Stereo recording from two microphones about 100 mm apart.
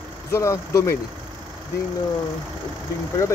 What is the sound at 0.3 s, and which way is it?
Speech, 30° left (ahead or behind).